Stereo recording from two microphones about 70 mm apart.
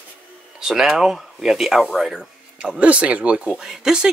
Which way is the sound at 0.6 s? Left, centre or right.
Centre.